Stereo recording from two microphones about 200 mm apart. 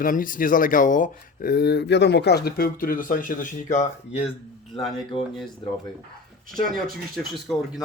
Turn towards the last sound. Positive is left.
turn(degrees=0)  # may be behind; listen again after turning